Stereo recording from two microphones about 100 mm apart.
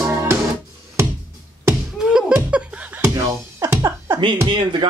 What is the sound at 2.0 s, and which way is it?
Beatboxing, 5° right (ahead or behind).